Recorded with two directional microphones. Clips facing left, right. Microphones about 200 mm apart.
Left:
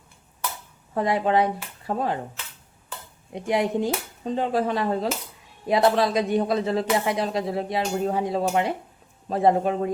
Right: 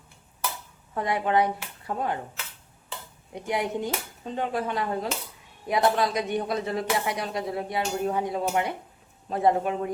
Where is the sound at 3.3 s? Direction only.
25° left (ahead or behind).